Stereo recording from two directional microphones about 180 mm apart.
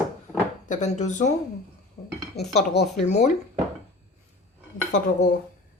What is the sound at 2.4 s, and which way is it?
Dishes, 65° left (ahead or behind).